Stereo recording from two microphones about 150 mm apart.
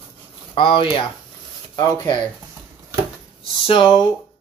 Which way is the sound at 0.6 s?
35° left (ahead or behind).